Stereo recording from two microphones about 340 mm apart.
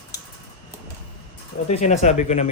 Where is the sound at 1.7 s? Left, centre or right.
Centre.